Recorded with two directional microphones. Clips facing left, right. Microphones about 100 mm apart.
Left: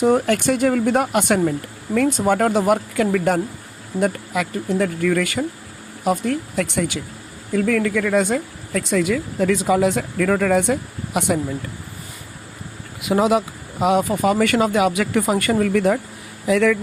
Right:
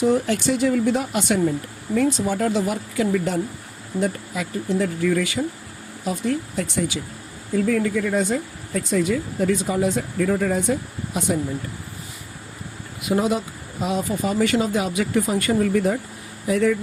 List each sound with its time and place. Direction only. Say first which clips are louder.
0.0 s speech: left 3 dB; 55° left (ahead or behind)
7.5 s speech: left 2 dB; 75° left (ahead or behind)
13.1 s speech: left 4 dB; 90° left